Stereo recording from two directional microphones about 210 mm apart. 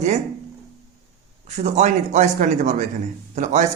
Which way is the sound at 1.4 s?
35° right (ahead or behind).